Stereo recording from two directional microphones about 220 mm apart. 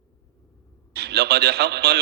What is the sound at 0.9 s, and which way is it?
A man's voice, 50° right (ahead or behind).